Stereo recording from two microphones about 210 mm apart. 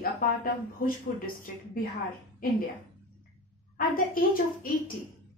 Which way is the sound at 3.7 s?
40° left (ahead or behind).